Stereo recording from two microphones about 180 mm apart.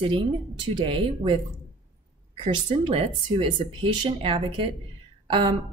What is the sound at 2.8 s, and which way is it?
A woman's voice, 30° right (ahead or behind).